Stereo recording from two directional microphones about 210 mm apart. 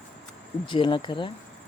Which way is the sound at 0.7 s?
25° left (ahead or behind).